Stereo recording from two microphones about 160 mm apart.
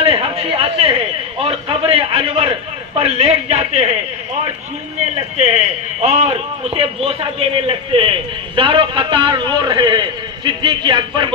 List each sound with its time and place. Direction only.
0.0 s a man's voice: 35° right (ahead or behind)
5.4 s a man's voice: 45° right (ahead or behind)